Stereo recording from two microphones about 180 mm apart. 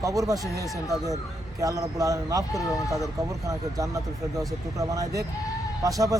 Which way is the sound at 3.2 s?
20° right (ahead or behind).